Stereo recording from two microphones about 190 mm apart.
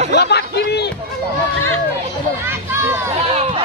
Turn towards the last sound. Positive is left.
turn(degrees=-15)  # may be behind; listen again after turning